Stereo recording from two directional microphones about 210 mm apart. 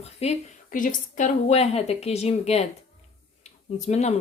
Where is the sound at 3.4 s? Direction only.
30° left (ahead or behind).